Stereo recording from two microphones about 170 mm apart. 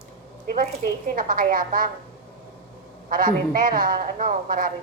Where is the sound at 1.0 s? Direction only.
55° right (ahead or behind).